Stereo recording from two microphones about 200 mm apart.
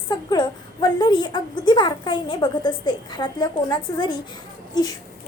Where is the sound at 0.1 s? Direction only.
20° left (ahead or behind).